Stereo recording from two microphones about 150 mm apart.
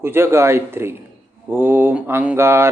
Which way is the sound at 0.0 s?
15° right (ahead or behind).